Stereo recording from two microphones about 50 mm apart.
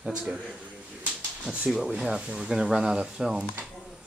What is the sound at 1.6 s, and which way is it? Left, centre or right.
Speech, centre.